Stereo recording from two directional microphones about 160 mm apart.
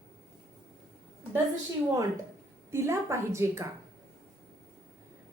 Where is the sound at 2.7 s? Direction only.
15° right (ahead or behind).